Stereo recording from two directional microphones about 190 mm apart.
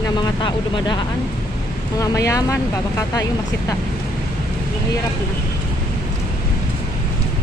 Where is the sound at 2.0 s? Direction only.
15° left (ahead or behind).